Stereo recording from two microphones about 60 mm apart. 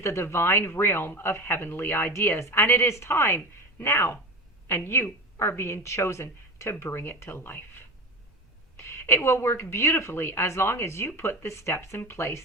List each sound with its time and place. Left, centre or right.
0.0 s a woman's voice: left
2.4 s a woman's voice: left
8.9 s a woman's voice: left